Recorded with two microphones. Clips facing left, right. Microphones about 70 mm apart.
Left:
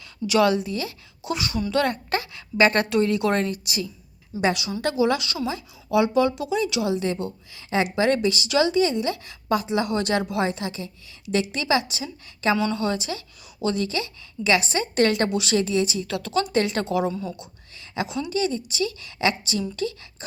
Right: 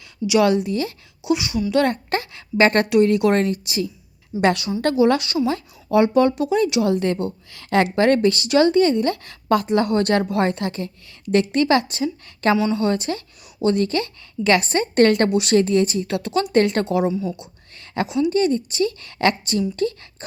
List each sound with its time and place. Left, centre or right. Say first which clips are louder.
0.4 s a woman's voice: right 3 dB; right
1.3 s a woman's voice: right 7 dB; centre
1.7 s a woman's voice: right 4 dB; right
4.4 s a woman's voice: right 5 dB; right
4.8 s a woman's voice: right 5 dB; right
6.8 s a woman's voice: right 4 dB; right
12.5 s a woman's voice: right 4 dB; centre
12.8 s a woman's voice: right 5 dB; right
16.0 s a woman's voice: right 3 dB; right
17.7 s a sound: right 4 dB; right
18.3 s a woman's voice: right 6 dB; right